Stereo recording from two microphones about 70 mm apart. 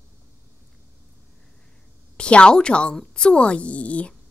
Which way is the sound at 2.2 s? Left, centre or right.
Centre.